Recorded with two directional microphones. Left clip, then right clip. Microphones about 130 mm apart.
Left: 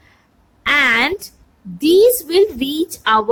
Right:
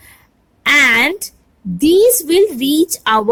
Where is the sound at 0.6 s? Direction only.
45° right (ahead or behind).